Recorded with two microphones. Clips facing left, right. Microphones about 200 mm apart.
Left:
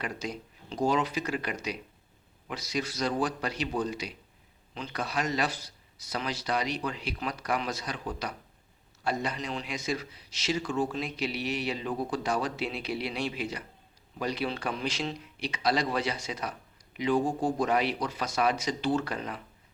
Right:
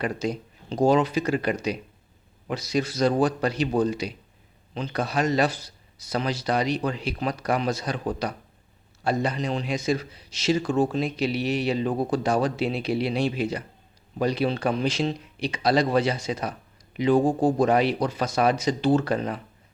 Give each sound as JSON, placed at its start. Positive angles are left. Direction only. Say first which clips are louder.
{"t": 0.0, "sound": "speech", "louder": "right 8 dB", "side_deg": -35}
{"t": 10.9, "sound": "speech", "louder": "right 8 dB", "side_deg": -30}